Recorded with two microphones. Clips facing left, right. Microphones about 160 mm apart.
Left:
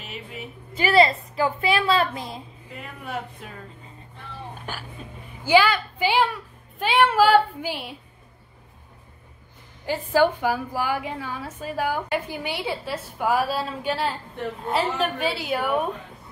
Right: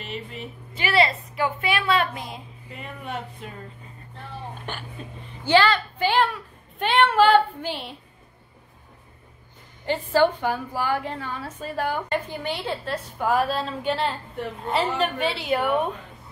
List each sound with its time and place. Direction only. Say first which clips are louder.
0.0 s speech: right 3 dB; 5° left (ahead or behind)
0.7 s a woman's voice: left 4 dB; 40° left (ahead or behind)
2.7 s a woman's voice: even; centre (ahead or behind)
4.6 s a woman's voice: right 1 dB; 5° left (ahead or behind)
9.8 s a woman's voice: even; 10° left (ahead or behind)